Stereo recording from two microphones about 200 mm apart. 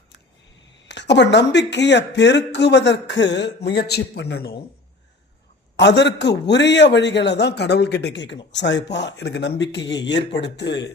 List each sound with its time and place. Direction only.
0.9 s speech: 60° left (ahead or behind)
5.7 s speech: 60° left (ahead or behind)